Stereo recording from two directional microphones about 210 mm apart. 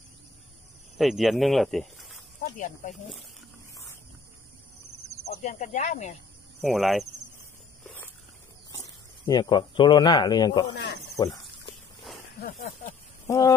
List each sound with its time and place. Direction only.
0.9 s speech: centre (ahead or behind)
2.6 s speech: 40° left (ahead or behind)
5.3 s speech: 35° left (ahead or behind)
6.6 s cricket: centre (ahead or behind)
7.8 s a sound: 10° left (ahead or behind)
8.8 s speech: 15° left (ahead or behind)
10.8 s speech: 55° left (ahead or behind)
12.4 s speech: 45° left (ahead or behind)
13.3 s speech: 15° left (ahead or behind)